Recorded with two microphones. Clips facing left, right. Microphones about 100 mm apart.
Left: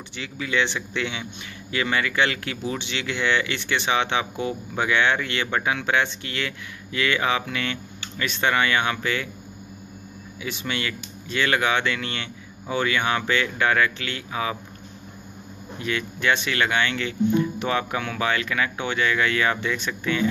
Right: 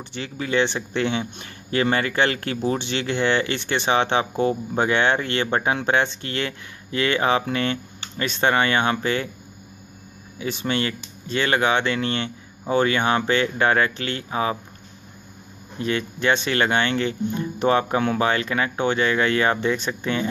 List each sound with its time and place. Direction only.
0.1 s speech: 40° right (ahead or behind)
10.4 s speech: 35° right (ahead or behind)
15.8 s speech: 35° right (ahead or behind)